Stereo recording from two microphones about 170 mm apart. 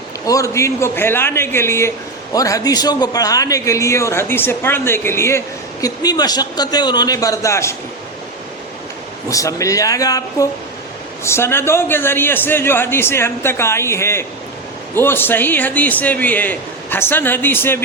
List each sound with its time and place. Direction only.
0.3 s a man's voice: 20° left (ahead or behind)
9.3 s a man's voice: 20° left (ahead or behind)